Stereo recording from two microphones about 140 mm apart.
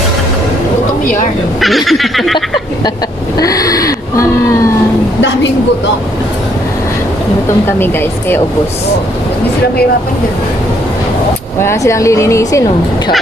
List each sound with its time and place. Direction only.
1.6 s fowl: centre (ahead or behind)
3.3 s gasp: 25° left (ahead or behind)
7.6 s speech: 15° left (ahead or behind)
11.6 s a woman's voice: 20° left (ahead or behind)